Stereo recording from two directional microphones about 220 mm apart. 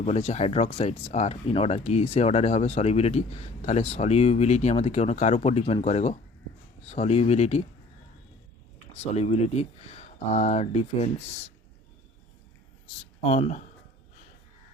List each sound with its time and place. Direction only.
0.0 s speech: 30° left (ahead or behind)
8.9 s speech: 30° left (ahead or behind)
13.2 s speech: 30° left (ahead or behind)